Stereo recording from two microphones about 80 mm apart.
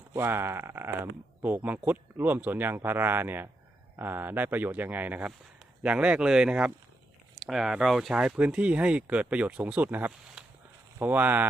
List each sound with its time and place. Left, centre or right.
0.1 s speech: right